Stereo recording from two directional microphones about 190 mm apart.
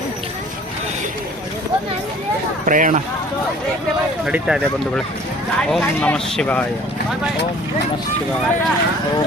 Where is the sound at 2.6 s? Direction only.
45° right (ahead or behind).